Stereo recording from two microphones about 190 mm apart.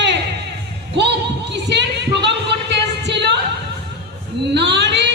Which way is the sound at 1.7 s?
65° right (ahead or behind).